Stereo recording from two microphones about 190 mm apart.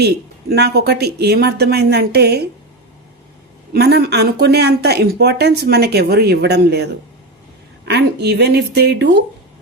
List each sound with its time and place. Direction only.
0.5 s speech: 60° right (ahead or behind)
3.7 s speech: 55° right (ahead or behind)
7.9 s speech: 60° right (ahead or behind)